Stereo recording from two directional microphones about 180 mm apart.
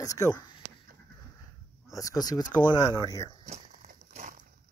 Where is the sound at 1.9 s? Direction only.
20° left (ahead or behind).